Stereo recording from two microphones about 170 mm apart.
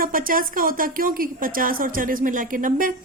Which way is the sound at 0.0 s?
55° right (ahead or behind).